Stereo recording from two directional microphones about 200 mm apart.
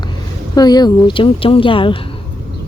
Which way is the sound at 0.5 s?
20° left (ahead or behind).